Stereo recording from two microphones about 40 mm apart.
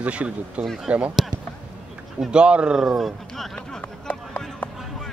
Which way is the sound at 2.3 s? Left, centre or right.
Right.